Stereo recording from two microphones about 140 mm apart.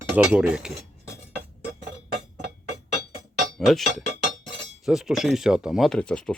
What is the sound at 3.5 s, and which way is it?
Speech, centre (ahead or behind).